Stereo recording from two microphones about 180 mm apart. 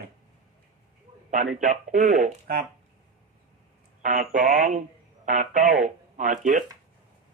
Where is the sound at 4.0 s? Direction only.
45° right (ahead or behind).